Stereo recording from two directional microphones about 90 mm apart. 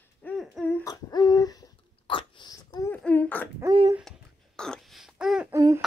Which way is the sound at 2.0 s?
65° left (ahead or behind).